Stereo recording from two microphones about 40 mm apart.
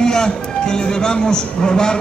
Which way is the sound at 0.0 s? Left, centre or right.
Centre.